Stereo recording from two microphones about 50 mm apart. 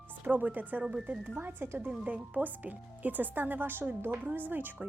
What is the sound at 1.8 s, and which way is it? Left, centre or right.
A woman's voice, right.